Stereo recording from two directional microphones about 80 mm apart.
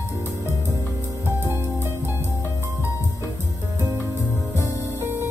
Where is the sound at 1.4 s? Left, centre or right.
Right.